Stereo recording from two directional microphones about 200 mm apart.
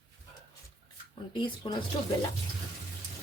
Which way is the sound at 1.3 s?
25° left (ahead or behind).